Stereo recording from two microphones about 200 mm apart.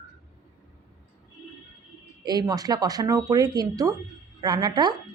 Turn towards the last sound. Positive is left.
turn(degrees=-20)  # may be behind; listen again after turning